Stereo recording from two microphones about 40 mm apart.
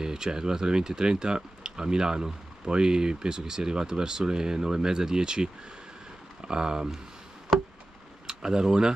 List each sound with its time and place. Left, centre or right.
0.0 s speech: centre
7.5 s chop: centre
8.3 s speech: centre